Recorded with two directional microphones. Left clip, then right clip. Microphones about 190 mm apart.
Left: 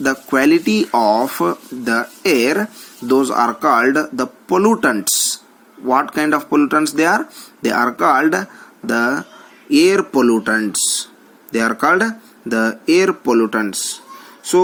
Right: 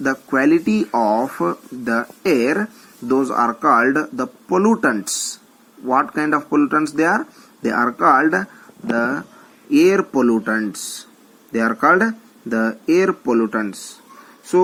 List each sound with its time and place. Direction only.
0.0 s speech: 50° left (ahead or behind)